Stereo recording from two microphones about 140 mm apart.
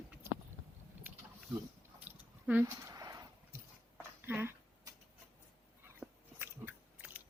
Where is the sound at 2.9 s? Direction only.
25° right (ahead or behind).